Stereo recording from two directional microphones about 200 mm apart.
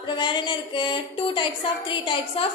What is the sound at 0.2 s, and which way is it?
A woman's voice, 20° left (ahead or behind).